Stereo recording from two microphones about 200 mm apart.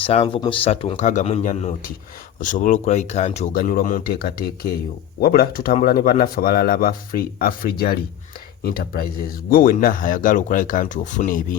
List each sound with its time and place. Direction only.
0.0 s speech: 30° left (ahead or behind)